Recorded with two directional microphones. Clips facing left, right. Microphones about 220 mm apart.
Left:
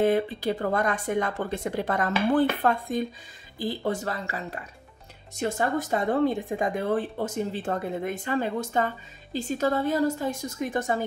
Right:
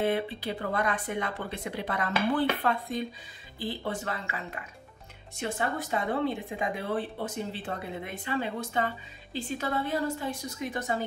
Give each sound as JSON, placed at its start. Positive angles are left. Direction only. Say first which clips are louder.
{"t": 0.0, "sound": "speech", "louder": "left 6 dB", "side_deg": 45}